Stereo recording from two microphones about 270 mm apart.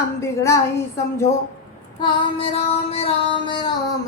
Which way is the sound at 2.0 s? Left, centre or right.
Centre.